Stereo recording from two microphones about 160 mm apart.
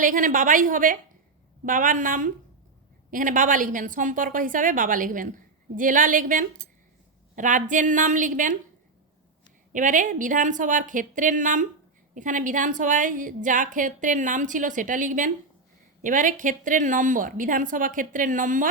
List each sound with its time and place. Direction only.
0.0 s a woman's voice: 55° right (ahead or behind)
9.7 s a woman's voice: 55° right (ahead or behind)